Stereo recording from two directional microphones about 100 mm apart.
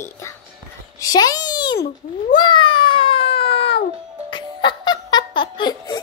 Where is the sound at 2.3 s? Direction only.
50° left (ahead or behind).